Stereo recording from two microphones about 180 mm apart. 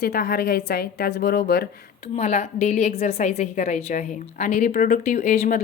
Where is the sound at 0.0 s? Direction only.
55° left (ahead or behind).